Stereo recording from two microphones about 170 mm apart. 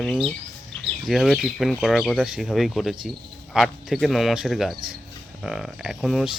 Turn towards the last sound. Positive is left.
turn(degrees=0)  # may be behind; listen again after turning